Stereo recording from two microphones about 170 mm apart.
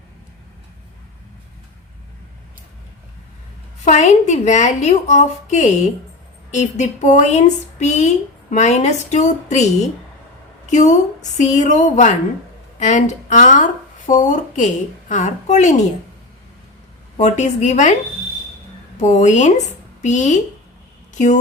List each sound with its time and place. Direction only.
3.8 s a woman's voice: 45° left (ahead or behind)
17.2 s speech: 45° left (ahead or behind)
18.9 s speech: 45° left (ahead or behind)